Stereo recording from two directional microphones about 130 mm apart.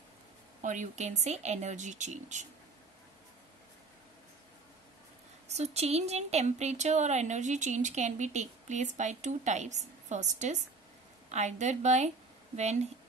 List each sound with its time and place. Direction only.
0.6 s speech: 75° right (ahead or behind)
5.5 s speech: 55° right (ahead or behind)